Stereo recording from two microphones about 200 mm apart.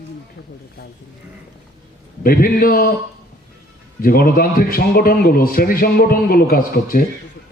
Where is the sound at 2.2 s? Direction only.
45° left (ahead or behind).